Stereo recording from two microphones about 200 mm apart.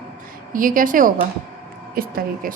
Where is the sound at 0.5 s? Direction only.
45° right (ahead or behind).